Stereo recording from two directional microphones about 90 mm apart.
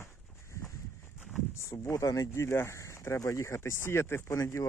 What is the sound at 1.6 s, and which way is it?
Speech, 35° left (ahead or behind).